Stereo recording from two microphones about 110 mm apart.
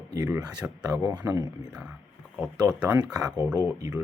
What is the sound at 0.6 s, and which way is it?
Speech, 10° right (ahead or behind).